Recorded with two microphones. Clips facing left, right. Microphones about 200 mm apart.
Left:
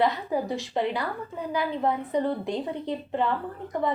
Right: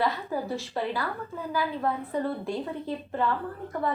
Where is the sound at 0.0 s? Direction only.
20° left (ahead or behind).